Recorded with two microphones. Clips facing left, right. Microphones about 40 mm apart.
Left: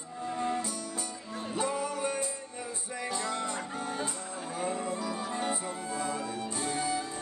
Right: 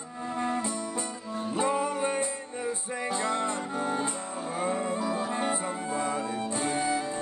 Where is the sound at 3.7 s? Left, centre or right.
Centre.